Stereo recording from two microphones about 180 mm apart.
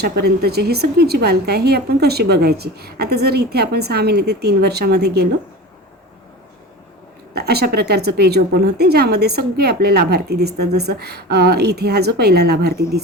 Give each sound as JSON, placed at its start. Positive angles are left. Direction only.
{"t": 0.0, "sound": "speech", "side_deg": -60}
{"t": 7.3, "sound": "speech", "side_deg": -60}